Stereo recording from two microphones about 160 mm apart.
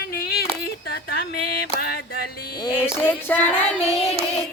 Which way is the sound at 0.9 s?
75° left (ahead or behind).